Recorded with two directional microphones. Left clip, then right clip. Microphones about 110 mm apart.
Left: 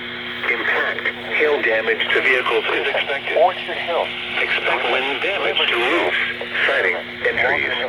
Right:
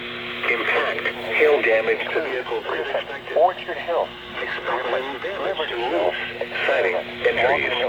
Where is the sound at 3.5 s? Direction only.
10° left (ahead or behind).